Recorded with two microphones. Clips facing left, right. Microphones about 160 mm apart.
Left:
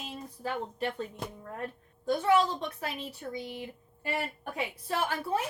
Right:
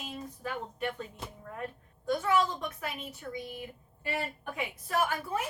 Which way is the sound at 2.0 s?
30° left (ahead or behind).